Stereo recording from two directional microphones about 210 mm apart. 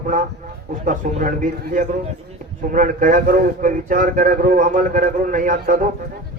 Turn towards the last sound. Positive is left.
turn(degrees=-40)  # may be behind; listen again after turning